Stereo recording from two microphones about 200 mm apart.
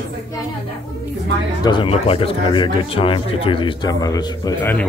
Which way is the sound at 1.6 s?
25° left (ahead or behind).